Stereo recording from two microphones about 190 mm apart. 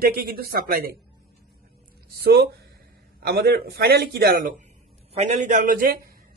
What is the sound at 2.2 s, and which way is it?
A man's voice, 60° right (ahead or behind).